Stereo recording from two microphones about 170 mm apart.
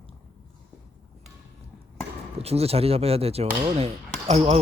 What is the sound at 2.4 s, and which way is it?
A man's voice, 35° right (ahead or behind).